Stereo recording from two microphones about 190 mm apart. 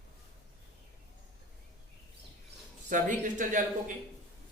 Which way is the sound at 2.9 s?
45° right (ahead or behind).